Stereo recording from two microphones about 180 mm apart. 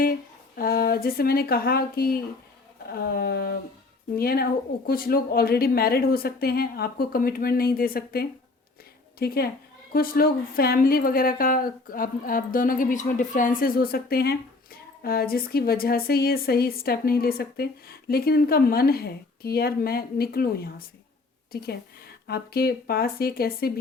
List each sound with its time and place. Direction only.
0.0 s a woman's voice: 55° left (ahead or behind)